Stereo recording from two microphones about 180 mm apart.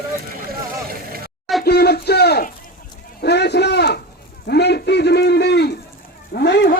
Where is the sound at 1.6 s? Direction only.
60° left (ahead or behind).